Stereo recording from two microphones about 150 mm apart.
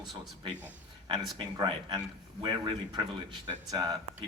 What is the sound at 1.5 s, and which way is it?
Speech, 30° right (ahead or behind).